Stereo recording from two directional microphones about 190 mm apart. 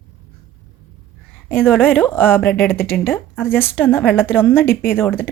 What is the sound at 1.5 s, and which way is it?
A woman's voice, 10° left (ahead or behind).